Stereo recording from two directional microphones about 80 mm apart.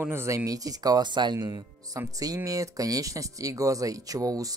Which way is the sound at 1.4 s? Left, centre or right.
Right.